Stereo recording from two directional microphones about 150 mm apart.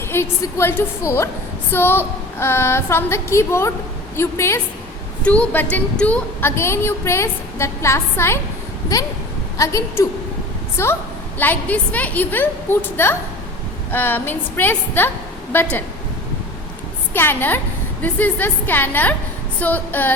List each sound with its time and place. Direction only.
0.1 s a woman's voice: 20° left (ahead or behind)
9.6 s a woman's voice: 20° left (ahead or behind)
17.2 s a woman's voice: 15° left (ahead or behind)